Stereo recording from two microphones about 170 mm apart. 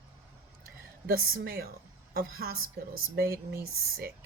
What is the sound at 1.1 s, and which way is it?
Speech, 60° right (ahead or behind).